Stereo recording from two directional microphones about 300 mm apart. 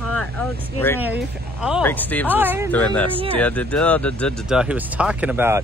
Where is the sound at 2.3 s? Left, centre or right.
Centre.